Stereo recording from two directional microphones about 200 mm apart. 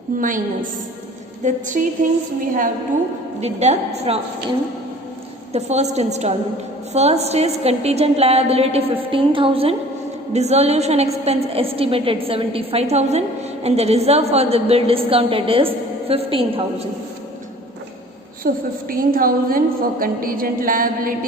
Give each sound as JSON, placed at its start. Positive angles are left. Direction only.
{"t": 0.2, "sound": "a woman's voice", "side_deg": -40}
{"t": 3.4, "sound": "a woman's voice", "side_deg": -35}
{"t": 18.4, "sound": "a woman's voice", "side_deg": -45}